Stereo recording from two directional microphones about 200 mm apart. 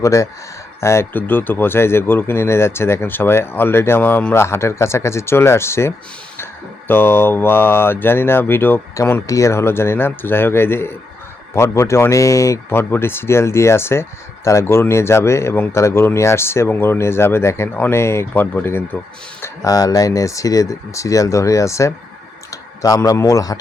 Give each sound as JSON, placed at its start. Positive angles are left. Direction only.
{"t": 0.0, "sound": "speech", "side_deg": 15}